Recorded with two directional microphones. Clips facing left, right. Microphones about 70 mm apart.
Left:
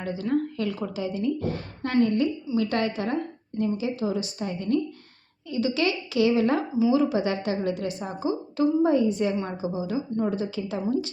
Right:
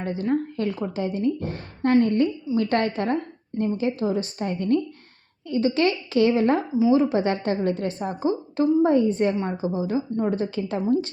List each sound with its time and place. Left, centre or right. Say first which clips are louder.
0.0 s a woman's voice: right 2 dB; right